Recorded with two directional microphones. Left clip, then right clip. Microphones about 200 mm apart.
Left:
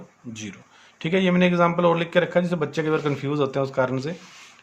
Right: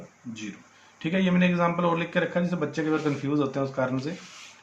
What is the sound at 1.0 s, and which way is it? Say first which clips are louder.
A man's voice: left 5 dB; 60° left (ahead or behind).